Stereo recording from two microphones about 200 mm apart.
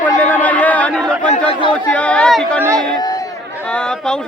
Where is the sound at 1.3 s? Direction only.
25° left (ahead or behind).